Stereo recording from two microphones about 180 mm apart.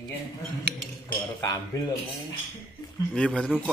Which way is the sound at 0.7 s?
65° right (ahead or behind).